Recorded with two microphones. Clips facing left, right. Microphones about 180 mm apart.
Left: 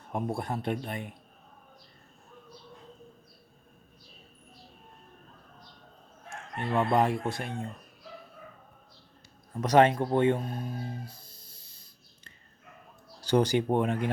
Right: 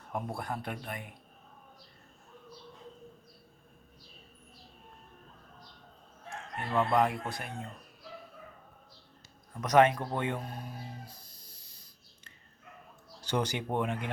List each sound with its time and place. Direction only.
0.1 s speech: 25° left (ahead or behind)
6.7 s speech: 25° left (ahead or behind)
9.6 s speech: 30° left (ahead or behind)